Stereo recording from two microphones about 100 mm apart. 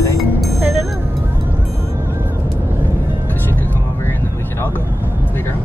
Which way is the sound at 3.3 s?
20° left (ahead or behind).